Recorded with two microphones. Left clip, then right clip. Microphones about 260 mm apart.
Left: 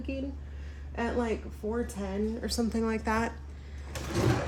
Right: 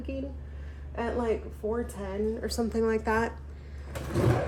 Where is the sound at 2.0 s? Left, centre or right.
Left.